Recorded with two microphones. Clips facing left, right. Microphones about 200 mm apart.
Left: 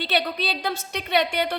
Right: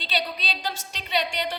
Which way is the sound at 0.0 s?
60° left (ahead or behind).